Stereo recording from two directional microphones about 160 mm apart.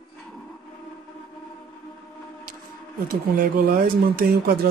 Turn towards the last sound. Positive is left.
turn(degrees=-75)  # may be behind; listen again after turning